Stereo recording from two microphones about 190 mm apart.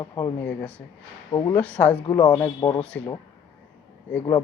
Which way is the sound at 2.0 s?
25° left (ahead or behind).